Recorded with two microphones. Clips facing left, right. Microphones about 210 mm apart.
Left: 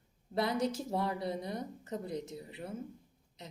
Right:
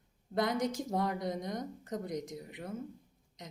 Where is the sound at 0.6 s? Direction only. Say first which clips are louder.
Even; 30° left (ahead or behind).